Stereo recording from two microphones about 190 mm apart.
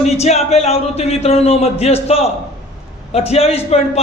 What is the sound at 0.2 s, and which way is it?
A man's voice, 35° left (ahead or behind).